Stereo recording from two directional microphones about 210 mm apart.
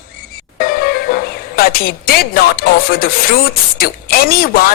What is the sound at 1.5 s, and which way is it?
A woman's voice, 45° left (ahead or behind).